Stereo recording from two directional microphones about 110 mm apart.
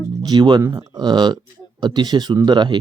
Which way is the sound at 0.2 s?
40° right (ahead or behind).